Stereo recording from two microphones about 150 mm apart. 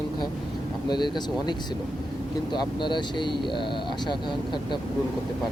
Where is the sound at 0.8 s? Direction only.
30° left (ahead or behind).